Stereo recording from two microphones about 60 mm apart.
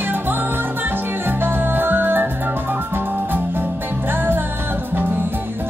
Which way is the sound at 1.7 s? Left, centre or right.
Right.